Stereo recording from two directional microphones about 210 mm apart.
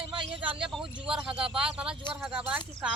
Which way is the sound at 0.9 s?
20° right (ahead or behind).